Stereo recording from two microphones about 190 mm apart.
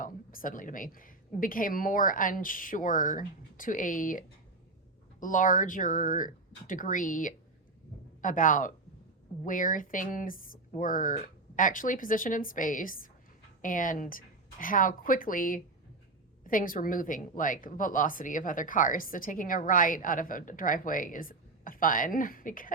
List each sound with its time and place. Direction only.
0.0 s speech: 45° left (ahead or behind)
5.2 s a woman's voice: 45° left (ahead or behind)